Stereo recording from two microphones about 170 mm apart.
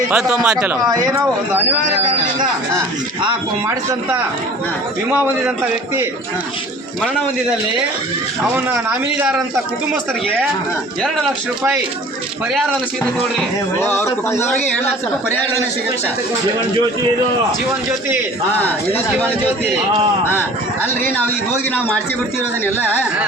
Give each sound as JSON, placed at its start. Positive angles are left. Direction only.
{"t": 0.1, "sound": "speech", "side_deg": -5}
{"t": 0.9, "sound": "speech", "side_deg": -25}
{"t": 1.8, "sound": "a man's voice", "side_deg": -50}
{"t": 8.5, "sound": "a man's voice", "side_deg": -10}
{"t": 11.0, "sound": "speech", "side_deg": 0}
{"t": 13.7, "sound": "a man's voice", "side_deg": 15}